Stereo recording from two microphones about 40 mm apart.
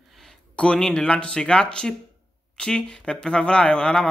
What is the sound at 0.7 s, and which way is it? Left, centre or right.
Speech, centre.